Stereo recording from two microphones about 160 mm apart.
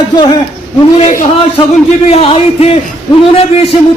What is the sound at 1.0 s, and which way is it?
Speech, 55° left (ahead or behind).